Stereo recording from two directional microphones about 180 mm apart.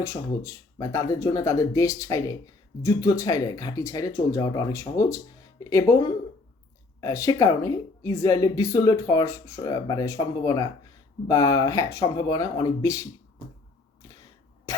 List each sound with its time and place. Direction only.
0.0 s speech: 15° left (ahead or behind)